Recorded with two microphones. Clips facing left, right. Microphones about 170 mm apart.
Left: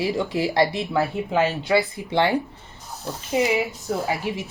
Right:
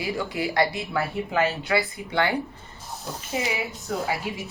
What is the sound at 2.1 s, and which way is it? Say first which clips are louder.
Speech: left 4 dB; 25° left (ahead or behind).